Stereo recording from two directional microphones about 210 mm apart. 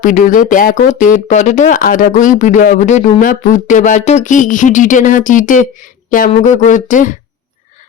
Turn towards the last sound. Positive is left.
turn(degrees=40)  # may be behind; listen again after turning